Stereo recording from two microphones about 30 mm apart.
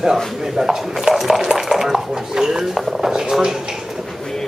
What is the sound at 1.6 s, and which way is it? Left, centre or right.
Dishes, centre.